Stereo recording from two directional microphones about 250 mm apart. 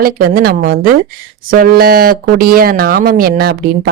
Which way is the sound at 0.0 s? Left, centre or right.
Right.